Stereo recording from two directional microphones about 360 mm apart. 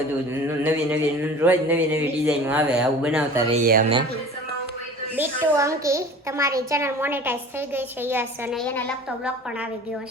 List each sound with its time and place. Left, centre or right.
0.4 s a child's voice: centre
3.7 s speech: centre
5.1 s a child's voice: centre